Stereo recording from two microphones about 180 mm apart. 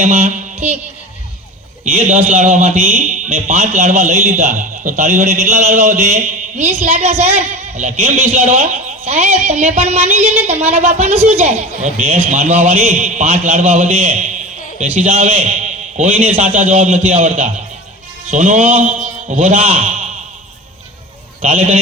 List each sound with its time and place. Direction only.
0.0 s a sound: 40° right (ahead or behind)
2.3 s a man's voice: 35° right (ahead or behind)
21.4 s a man's voice: 35° right (ahead or behind)